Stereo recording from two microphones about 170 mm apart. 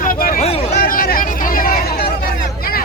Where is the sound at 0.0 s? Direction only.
55° left (ahead or behind).